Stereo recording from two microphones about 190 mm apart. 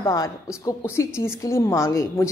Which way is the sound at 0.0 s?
20° left (ahead or behind).